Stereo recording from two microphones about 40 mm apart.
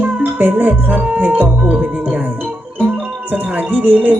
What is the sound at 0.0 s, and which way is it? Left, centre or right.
Music, right.